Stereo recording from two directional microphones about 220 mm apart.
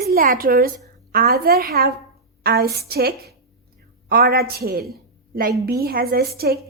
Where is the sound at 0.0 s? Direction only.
45° right (ahead or behind).